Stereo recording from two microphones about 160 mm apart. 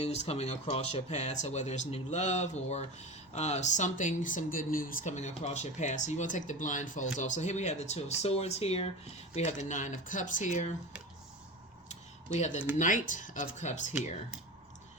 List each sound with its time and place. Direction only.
0.0 s speech: 40° left (ahead or behind)
11.9 s a sound: 45° left (ahead or behind)
12.7 s speech: 55° left (ahead or behind)